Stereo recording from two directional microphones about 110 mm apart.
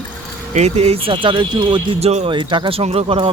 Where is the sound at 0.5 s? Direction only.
80° right; by 2.0 s 45° right (ahead or behind).